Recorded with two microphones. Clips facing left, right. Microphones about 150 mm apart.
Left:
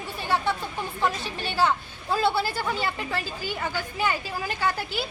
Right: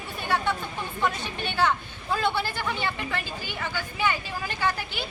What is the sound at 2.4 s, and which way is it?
A woman's voice, 35° left (ahead or behind).